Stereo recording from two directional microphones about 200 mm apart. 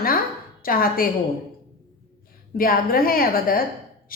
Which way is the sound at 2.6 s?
45° left (ahead or behind).